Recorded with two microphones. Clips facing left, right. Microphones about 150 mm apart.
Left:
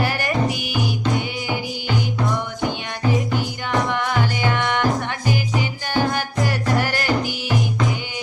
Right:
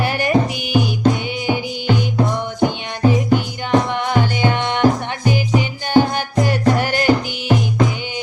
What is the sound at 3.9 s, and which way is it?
Music, 20° right (ahead or behind).